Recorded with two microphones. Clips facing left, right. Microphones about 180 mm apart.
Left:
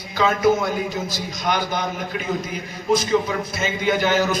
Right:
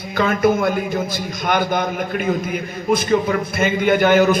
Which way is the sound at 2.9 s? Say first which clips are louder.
Right 2 dB; 55° right (ahead or behind).